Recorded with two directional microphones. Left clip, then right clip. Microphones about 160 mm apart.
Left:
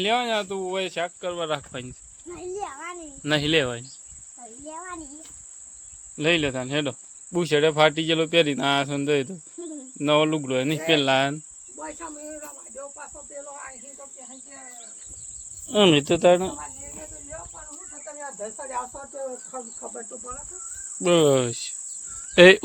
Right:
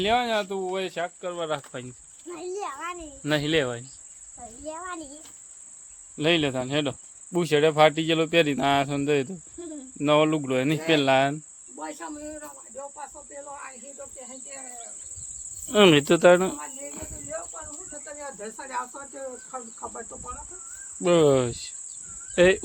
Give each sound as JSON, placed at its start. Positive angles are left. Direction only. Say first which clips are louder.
{"t": 0.0, "sound": "speech", "louder": "even", "side_deg": 0}
{"t": 2.3, "sound": "a sound", "louder": "even", "side_deg": -5}
{"t": 3.2, "sound": "speech", "louder": "left 2 dB", "side_deg": 10}
{"t": 4.7, "sound": "a child's voice", "louder": "right 1 dB", "side_deg": -20}
{"t": 6.1, "sound": "speech", "louder": "left 1 dB", "side_deg": -5}
{"t": 11.8, "sound": "speech", "louder": "right 1 dB", "side_deg": -50}
{"t": 15.6, "sound": "speech", "louder": "right 1 dB", "side_deg": -15}
{"t": 21.0, "sound": "speech", "louder": "left 1 dB", "side_deg": 0}
{"t": 22.4, "sound": "speech", "louder": "left 7 dB", "side_deg": 30}